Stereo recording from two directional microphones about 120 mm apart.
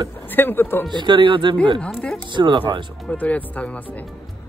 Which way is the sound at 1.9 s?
5° left (ahead or behind).